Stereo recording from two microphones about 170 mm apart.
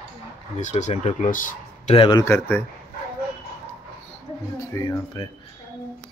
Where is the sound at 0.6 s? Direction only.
40° left (ahead or behind).